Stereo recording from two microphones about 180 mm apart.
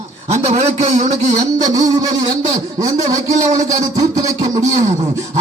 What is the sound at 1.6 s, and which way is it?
Speech, 20° right (ahead or behind).